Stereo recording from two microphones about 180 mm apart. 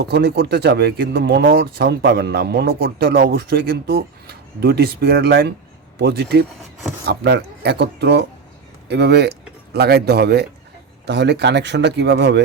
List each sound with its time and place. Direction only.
0.0 s speech: 65° right (ahead or behind)